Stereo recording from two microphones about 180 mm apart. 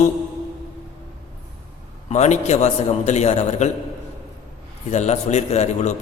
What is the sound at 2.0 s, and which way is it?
A man's voice, 40° left (ahead or behind).